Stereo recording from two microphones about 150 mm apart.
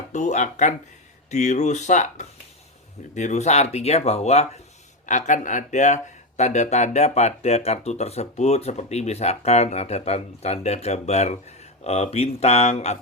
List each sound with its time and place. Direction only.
0.1 s speech: 55° left (ahead or behind)